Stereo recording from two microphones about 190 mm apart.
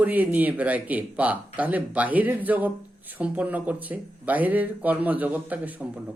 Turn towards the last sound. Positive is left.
turn(degrees=-10)  # may be behind; listen again after turning